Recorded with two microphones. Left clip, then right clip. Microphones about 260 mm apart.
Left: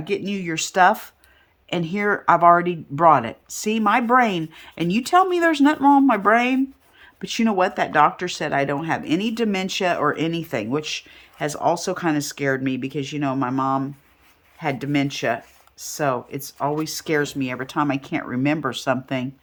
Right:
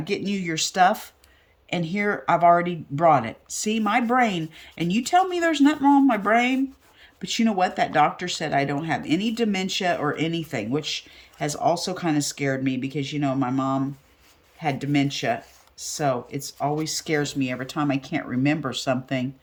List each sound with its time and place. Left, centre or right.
0.0 s speech: centre